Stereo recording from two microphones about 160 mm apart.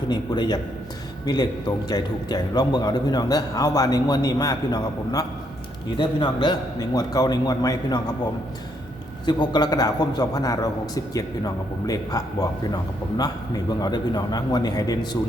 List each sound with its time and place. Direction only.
0.1 s a man's voice: 25° left (ahead or behind)
9.2 s a man's voice: 25° left (ahead or behind)